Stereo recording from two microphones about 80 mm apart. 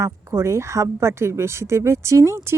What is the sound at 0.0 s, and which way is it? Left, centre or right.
A woman's voice, right.